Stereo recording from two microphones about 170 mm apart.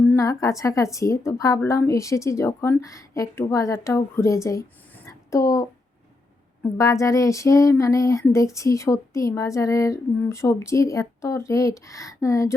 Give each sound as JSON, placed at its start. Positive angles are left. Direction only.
{"t": 0.0, "sound": "a woman's voice", "side_deg": 15}
{"t": 5.0, "sound": "a sound", "side_deg": 20}
{"t": 8.5, "sound": "a woman's voice", "side_deg": 20}